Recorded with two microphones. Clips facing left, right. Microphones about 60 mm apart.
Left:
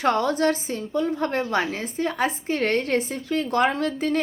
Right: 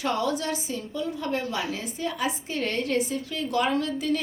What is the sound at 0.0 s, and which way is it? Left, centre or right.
Speech, left.